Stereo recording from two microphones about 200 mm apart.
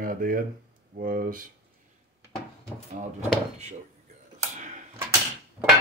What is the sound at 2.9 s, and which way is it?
Speech, 35° right (ahead or behind).